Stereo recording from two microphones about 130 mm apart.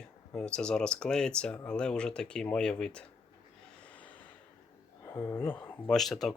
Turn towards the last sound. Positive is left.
turn(degrees=0)  # may be behind; listen again after turning